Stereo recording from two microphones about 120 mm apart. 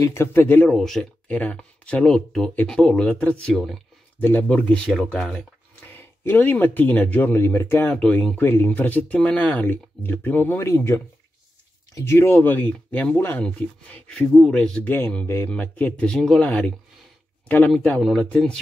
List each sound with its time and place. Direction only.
0.0 s speech: 20° left (ahead or behind); by 3.8 s 5° left (ahead or behind)
4.2 s speech: 15° left (ahead or behind)
5.9 s speech: 15° left (ahead or behind)
7.9 s speech: 5° left (ahead or behind)